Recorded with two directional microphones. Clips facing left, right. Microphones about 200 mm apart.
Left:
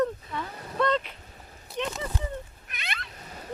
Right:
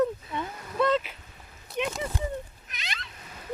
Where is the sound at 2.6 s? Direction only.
60° left (ahead or behind).